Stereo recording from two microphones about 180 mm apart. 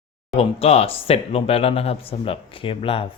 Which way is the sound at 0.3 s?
35° left (ahead or behind).